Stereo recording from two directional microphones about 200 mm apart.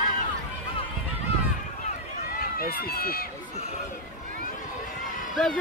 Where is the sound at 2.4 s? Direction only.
45° left (ahead or behind).